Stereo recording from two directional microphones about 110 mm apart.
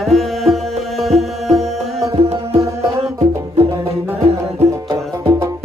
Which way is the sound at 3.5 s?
65° right (ahead or behind).